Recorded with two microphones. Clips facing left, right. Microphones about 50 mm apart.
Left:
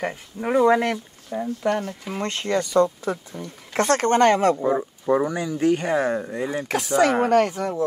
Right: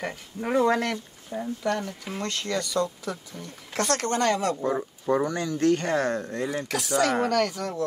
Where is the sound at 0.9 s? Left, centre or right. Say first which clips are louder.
Left 4 dB; centre.